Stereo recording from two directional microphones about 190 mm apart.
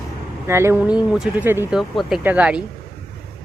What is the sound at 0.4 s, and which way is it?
Speech, 15° right (ahead or behind).